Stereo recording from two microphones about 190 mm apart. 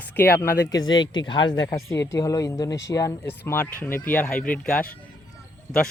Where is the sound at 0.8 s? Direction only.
25° left (ahead or behind); by 4.7 s 5° left (ahead or behind).